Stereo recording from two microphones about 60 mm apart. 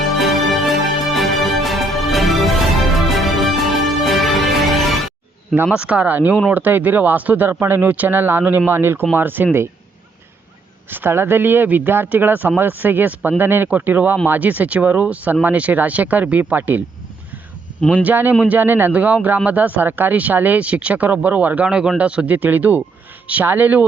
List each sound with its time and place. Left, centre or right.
0.2 s music: centre
5.7 s speech: centre; by 9.6 s right
10.9 s speech: right
17.7 s speech: left
18.0 s speech: right
18.9 s speech: right
21.7 s speech: centre; by 23.8 s right